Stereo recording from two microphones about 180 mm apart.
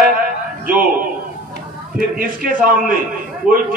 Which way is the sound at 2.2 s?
50° right (ahead or behind).